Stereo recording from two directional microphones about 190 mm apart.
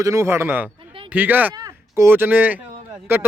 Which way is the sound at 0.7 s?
25° right (ahead or behind).